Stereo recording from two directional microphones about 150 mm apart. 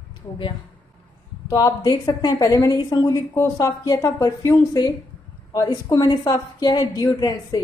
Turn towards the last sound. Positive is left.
turn(degrees=25)  # may be behind; listen again after turning